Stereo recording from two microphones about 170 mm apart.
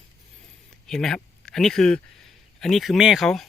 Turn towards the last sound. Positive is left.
turn(degrees=0)  # may be behind; listen again after turning